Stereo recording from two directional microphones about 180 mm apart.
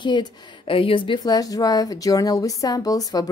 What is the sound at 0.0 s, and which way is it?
A woman's voice, 25° left (ahead or behind).